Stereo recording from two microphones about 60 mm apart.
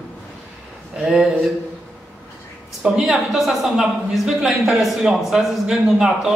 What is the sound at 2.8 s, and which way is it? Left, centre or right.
A man's voice, centre.